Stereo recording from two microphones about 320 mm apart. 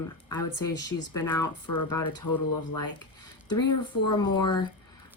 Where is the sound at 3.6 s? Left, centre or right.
Left.